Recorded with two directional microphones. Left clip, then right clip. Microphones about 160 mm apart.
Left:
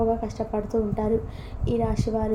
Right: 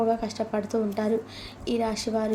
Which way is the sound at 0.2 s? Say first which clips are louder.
Even; 20° right (ahead or behind).